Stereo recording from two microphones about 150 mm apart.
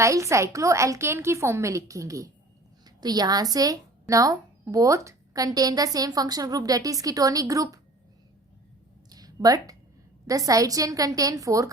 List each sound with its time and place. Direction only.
0.0 s speech: 20° right (ahead or behind)
9.0 s a sound: 25° right (ahead or behind)
10.2 s speech: 25° right (ahead or behind)